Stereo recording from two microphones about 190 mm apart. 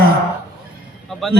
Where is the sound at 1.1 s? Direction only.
Centre (ahead or behind).